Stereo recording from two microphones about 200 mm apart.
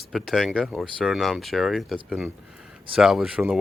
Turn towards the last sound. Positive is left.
turn(degrees=-5)  # may be behind; listen again after turning